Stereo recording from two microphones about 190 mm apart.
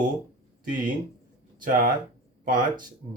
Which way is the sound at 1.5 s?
45° right (ahead or behind).